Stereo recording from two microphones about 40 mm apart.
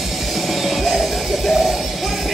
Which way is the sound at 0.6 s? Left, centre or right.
Centre.